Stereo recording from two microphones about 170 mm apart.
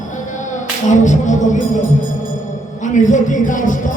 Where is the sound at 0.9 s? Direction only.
45° left (ahead or behind).